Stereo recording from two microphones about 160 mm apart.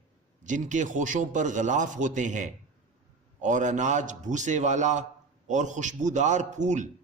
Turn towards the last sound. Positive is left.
turn(degrees=-50)  # may be behind; listen again after turning